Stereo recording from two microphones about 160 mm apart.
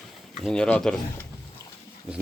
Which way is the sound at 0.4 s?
5° left (ahead or behind).